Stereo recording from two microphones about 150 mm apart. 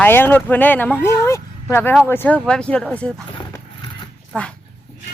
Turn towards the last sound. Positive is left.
turn(degrees=5)  # may be behind; listen again after turning